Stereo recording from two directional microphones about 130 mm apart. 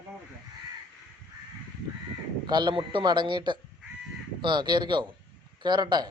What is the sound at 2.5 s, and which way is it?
Speech, 35° right (ahead or behind).